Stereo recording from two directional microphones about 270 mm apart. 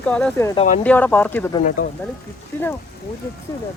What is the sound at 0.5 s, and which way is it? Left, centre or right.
Speech, left.